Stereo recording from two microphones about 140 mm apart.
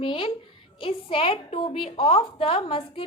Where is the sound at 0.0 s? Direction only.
40° left (ahead or behind).